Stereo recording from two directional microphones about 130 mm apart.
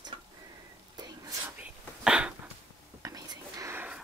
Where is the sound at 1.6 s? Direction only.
5° right (ahead or behind).